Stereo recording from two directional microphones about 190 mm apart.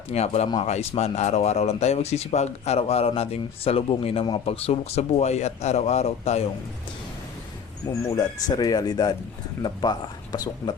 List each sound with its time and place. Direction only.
0.1 s speech: 35° left (ahead or behind)
8.1 s speech: 20° left (ahead or behind)